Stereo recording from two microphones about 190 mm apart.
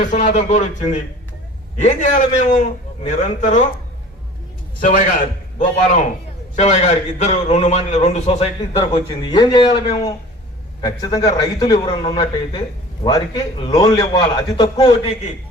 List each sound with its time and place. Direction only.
0.0 s a man's voice: 40° left (ahead or behind)
4.8 s a man's voice: 45° left (ahead or behind)